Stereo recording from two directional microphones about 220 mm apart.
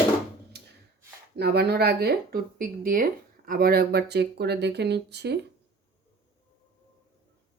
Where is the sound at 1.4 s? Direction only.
45° right (ahead or behind).